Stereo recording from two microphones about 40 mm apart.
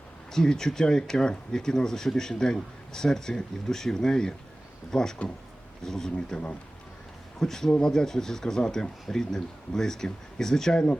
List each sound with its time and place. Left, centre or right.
0.3 s speech: centre